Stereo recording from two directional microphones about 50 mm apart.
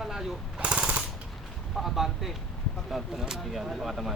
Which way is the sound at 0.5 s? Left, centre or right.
Right.